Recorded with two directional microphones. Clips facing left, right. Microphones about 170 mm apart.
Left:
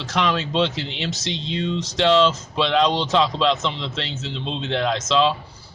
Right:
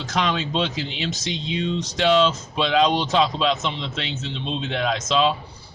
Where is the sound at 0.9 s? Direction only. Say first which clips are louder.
Even; 75° left (ahead or behind).